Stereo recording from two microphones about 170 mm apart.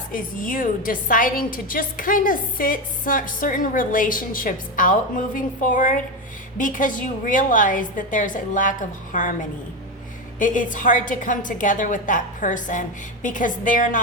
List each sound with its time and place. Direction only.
0.1 s a woman's voice: 55° left (ahead or behind)